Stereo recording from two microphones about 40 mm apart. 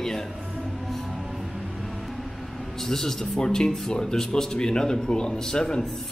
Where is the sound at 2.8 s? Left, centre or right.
Centre.